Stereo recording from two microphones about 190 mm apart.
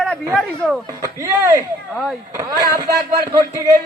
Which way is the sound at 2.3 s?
20° right (ahead or behind).